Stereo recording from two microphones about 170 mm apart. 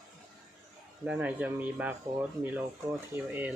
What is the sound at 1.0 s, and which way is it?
Speech, 10° right (ahead or behind).